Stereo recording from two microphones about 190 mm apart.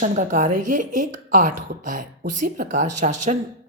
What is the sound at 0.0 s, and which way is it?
A woman's voice, 40° right (ahead or behind).